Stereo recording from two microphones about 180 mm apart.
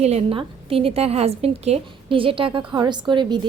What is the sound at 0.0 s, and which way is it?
A woman's voice, 35° right (ahead or behind).